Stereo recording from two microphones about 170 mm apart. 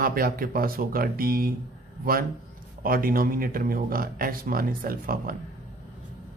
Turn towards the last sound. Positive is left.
turn(degrees=-60)  # may be behind; listen again after turning